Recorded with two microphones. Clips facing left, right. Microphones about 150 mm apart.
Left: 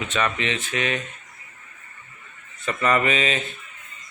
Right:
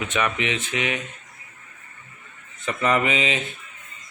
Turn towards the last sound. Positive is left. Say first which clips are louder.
# even
turn(degrees=-15)  # may be behind; listen again after turning